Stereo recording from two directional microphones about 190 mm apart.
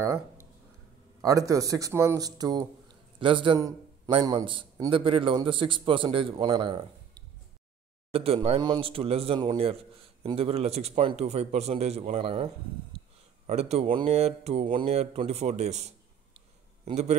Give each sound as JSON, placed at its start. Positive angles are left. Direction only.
{"t": 0.0, "sound": "a sound", "side_deg": -15}
{"t": 1.2, "sound": "a man's voice", "side_deg": -15}
{"t": 13.5, "sound": "speech", "side_deg": -35}